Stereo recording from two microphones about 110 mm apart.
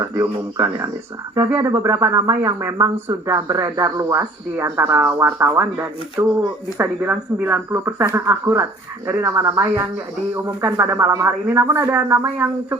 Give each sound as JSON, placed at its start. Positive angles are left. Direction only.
{"t": 0.0, "sound": "speech", "side_deg": -25}